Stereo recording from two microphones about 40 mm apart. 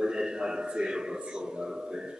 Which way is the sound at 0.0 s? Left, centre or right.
Right.